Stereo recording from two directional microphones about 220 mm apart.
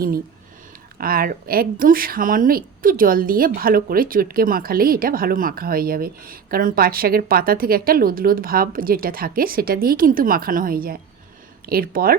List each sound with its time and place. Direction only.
0.9 s speech: 40° right (ahead or behind)